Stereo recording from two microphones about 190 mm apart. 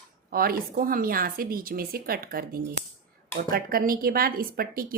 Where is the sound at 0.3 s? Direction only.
50° right (ahead or behind).